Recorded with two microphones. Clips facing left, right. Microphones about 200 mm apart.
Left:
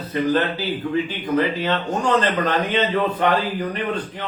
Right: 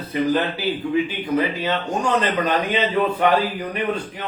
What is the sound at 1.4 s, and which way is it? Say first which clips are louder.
A man's voice: left 2 dB; 10° right (ahead or behind).